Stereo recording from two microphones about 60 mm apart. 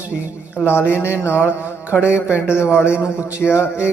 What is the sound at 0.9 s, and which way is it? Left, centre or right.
A man's voice, left.